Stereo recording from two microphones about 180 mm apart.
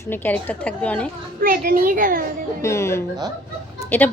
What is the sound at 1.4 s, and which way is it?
Speech, 50° right (ahead or behind).